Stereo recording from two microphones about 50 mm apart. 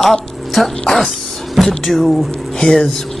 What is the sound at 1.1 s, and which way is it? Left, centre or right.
Music, centre.